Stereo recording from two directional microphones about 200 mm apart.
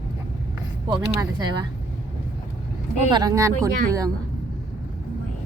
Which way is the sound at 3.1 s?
20° right (ahead or behind).